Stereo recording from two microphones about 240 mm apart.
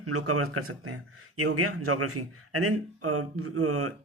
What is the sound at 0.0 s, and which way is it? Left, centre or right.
Speech, right.